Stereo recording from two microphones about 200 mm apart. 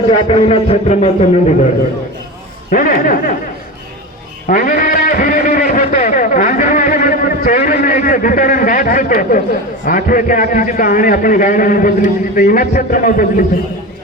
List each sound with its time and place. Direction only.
0.1 s a man's voice: 30° left (ahead or behind)
2.6 s a man's voice: 45° left (ahead or behind)
4.4 s a sound: 40° left (ahead or behind)
9.8 s a man's voice: 45° left (ahead or behind)